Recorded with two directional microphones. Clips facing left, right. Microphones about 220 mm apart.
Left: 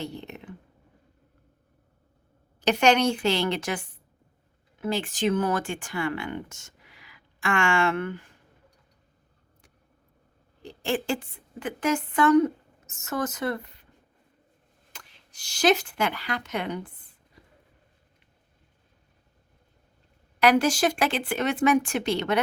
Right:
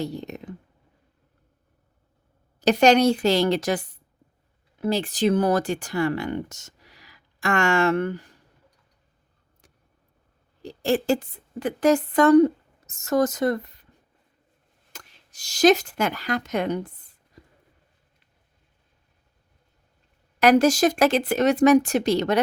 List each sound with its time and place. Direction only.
0.0 s a sound: 40° right (ahead or behind)
2.6 s a woman's voice: 40° right (ahead or behind)
10.6 s a woman's voice: 40° right (ahead or behind)
14.9 s speech: 40° right (ahead or behind)
20.4 s a woman's voice: 40° right (ahead or behind)